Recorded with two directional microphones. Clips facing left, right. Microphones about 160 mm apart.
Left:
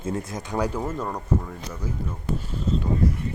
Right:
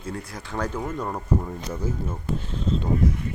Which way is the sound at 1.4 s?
25° right (ahead or behind).